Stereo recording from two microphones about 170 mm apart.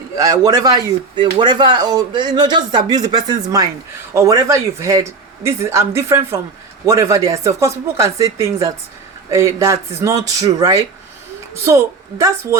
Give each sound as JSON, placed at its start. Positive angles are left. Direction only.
{"t": 0.2, "sound": "speech", "side_deg": -20}